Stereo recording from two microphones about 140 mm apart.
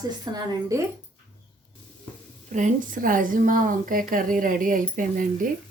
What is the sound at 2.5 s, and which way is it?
A woman's voice, 60° right (ahead or behind).